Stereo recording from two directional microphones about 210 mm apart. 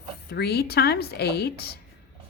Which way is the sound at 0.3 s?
50° left (ahead or behind).